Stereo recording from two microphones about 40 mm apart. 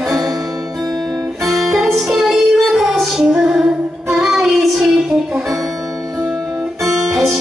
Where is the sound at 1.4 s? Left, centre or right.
Centre.